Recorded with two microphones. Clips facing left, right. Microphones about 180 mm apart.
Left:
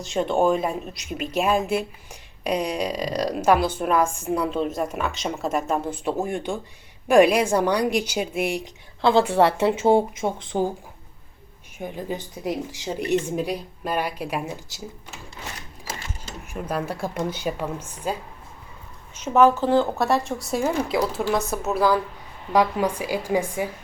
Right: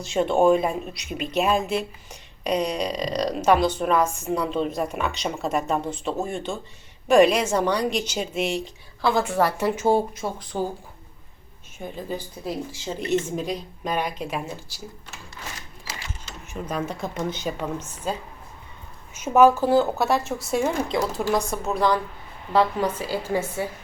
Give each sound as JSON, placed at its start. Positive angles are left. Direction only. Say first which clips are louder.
{"t": 0.0, "sound": "a woman's voice", "louder": "right 2 dB", "side_deg": 0}
{"t": 9.0, "sound": "speech", "louder": "left 4 dB", "side_deg": 25}
{"t": 11.8, "sound": "a woman's voice", "louder": "left 1 dB", "side_deg": 15}
{"t": 15.9, "sound": "mechanisms", "louder": "left 3 dB", "side_deg": 50}
{"t": 16.5, "sound": "a woman's voice", "louder": "left 1 dB", "side_deg": 10}
{"t": 19.1, "sound": "a woman's voice", "louder": "right 1 dB", "side_deg": -10}